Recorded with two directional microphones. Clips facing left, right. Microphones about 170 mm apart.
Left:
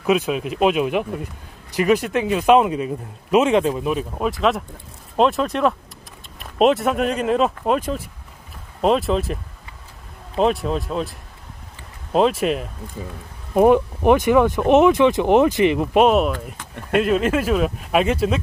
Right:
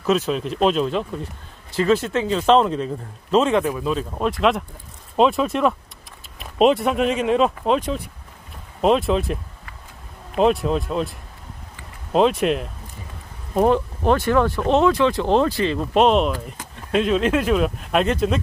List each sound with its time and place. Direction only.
0.0 s speech: 10° left (ahead or behind)
4.2 s speech: centre (ahead or behind)
13.6 s speech: 15° left (ahead or behind)